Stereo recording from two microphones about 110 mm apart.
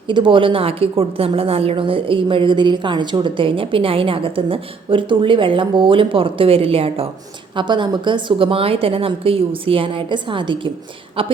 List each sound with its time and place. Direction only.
0.1 s a woman's voice: 50° right (ahead or behind)
7.5 s a woman's voice: 45° right (ahead or behind)